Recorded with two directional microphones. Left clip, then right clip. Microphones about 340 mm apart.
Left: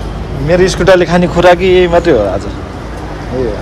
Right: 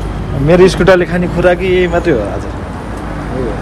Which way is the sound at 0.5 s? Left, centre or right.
Centre.